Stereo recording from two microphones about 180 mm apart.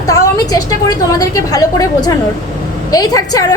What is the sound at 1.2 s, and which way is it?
A woman's voice, 20° left (ahead or behind).